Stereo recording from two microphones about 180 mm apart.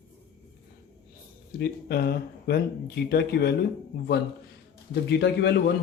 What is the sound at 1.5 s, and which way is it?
A man's voice, 60° left (ahead or behind).